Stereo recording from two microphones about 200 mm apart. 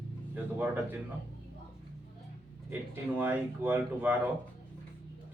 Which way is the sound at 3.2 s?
10° right (ahead or behind).